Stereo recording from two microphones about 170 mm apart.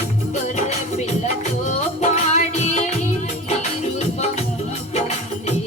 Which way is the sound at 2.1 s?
40° left (ahead or behind).